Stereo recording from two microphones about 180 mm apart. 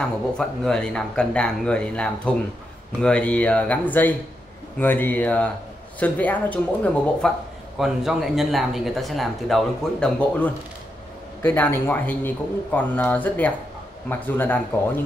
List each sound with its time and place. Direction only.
0.0 s a man's voice: 5° left (ahead or behind)